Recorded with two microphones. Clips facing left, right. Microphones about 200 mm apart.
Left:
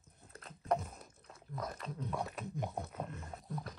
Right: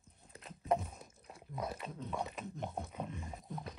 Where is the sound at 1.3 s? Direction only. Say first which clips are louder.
Right 2 dB; 5° right (ahead or behind).